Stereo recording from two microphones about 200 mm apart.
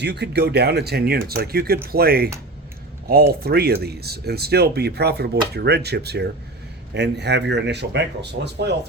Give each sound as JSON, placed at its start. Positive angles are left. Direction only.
{"t": 0.0, "sound": "speech", "side_deg": -55}
{"t": 3.4, "sound": "speech", "side_deg": -50}